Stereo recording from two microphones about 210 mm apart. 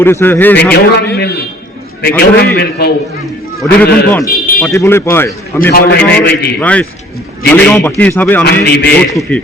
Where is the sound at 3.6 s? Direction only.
5° left (ahead or behind).